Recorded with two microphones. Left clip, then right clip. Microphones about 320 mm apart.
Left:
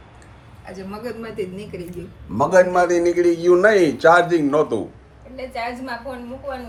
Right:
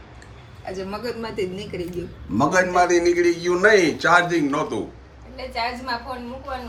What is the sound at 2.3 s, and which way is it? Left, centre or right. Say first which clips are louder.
A man's voice: left 3 dB; centre.